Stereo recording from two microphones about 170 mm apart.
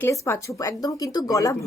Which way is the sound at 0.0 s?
15° left (ahead or behind).